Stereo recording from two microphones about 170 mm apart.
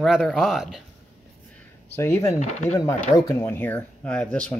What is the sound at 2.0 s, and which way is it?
Speech, 15° left (ahead or behind).